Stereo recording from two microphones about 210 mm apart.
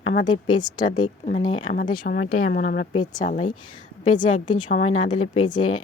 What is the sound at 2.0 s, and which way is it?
Speech, 40° left (ahead or behind).